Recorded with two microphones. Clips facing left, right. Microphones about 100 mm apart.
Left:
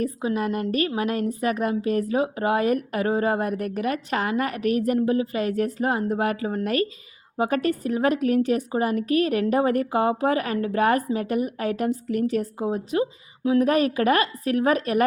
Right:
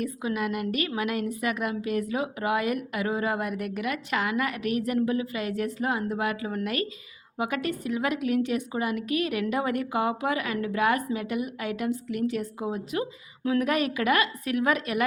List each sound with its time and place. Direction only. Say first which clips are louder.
0.0 s a woman's voice: left 4 dB; 35° left (ahead or behind)